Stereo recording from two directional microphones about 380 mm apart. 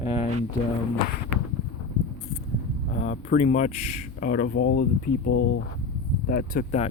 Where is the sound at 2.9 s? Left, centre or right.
Centre.